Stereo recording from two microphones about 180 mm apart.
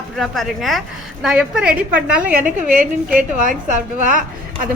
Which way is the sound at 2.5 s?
50° right (ahead or behind).